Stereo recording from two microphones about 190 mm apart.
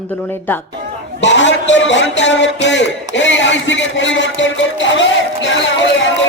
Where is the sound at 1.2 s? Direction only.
70° left (ahead or behind).